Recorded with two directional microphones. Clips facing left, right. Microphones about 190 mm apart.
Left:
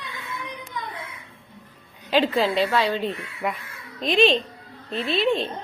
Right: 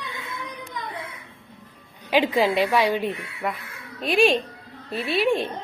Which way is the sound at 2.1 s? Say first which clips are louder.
Right 1 dB; 10° right (ahead or behind).